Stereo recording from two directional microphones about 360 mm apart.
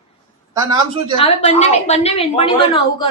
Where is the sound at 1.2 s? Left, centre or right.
Centre.